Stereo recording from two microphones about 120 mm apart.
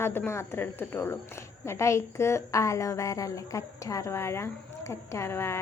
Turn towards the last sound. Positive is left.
turn(degrees=20)  # may be behind; listen again after turning